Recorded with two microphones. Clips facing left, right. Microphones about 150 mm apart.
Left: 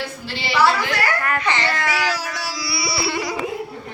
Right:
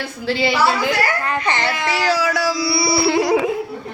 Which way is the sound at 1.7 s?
20° right (ahead or behind).